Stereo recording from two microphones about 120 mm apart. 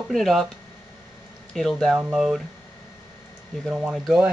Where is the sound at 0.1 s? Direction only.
Centre (ahead or behind).